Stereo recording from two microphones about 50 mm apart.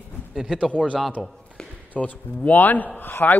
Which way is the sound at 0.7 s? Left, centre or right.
Left.